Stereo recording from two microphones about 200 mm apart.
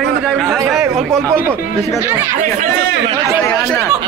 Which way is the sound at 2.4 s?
35° right (ahead or behind).